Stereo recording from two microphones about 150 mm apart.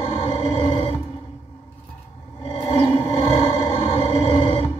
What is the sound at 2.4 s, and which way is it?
Music, 35° left (ahead or behind).